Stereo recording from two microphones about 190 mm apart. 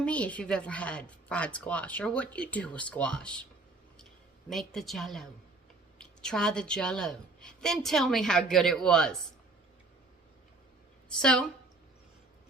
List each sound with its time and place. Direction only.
0.0 s speech: 5° left (ahead or behind)
4.4 s a woman's voice: centre (ahead or behind)
11.2 s a woman's voice: 5° left (ahead or behind)